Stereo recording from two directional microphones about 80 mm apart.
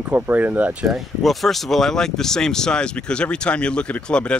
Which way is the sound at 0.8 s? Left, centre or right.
Centre.